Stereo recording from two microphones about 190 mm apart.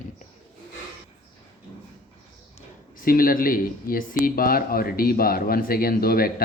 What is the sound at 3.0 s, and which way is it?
Speech, 50° left (ahead or behind).